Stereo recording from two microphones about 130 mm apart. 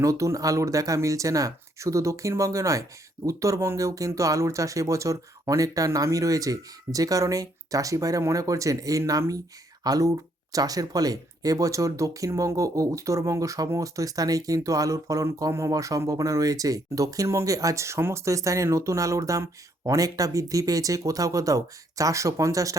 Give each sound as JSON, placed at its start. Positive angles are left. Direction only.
{"t": 0.0, "sound": "speech", "side_deg": -25}